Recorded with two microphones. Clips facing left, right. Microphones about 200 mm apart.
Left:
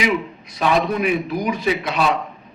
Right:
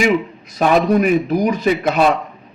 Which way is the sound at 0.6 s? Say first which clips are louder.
Right 5 dB; 45° right (ahead or behind).